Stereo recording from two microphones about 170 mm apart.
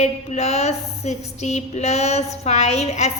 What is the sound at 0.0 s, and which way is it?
A woman's voice, 40° left (ahead or behind).